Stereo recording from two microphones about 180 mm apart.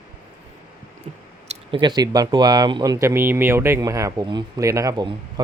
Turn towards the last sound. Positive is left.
turn(degrees=-20)  # may be behind; listen again after turning